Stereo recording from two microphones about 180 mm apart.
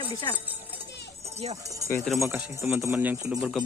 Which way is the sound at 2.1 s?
15° right (ahead or behind).